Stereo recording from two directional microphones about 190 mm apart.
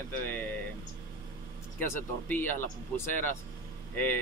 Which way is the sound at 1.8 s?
10° left (ahead or behind).